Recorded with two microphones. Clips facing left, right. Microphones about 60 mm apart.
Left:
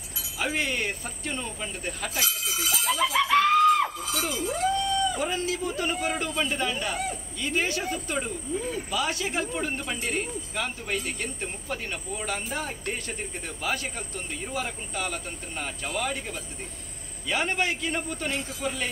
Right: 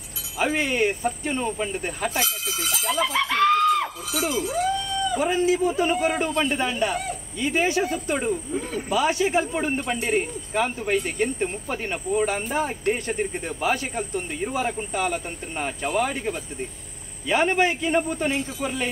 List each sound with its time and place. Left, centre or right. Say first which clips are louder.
0.6 s speech: right 6 dB; right
2.2 s speech: right 1 dB; centre
5.1 s speech: right 7 dB; right